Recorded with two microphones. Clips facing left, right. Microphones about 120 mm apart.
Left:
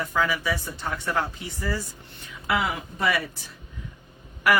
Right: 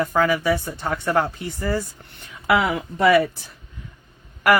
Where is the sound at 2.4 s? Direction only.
70° right (ahead or behind).